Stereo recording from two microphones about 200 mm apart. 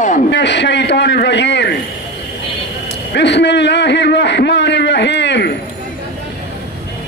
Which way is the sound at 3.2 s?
60° left (ahead or behind).